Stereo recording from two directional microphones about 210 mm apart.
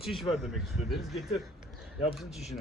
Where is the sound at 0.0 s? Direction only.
Centre (ahead or behind).